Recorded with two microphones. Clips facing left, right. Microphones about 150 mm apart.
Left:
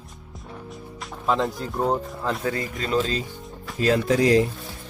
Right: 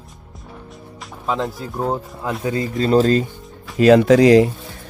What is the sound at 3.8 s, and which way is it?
Speech, 90° right.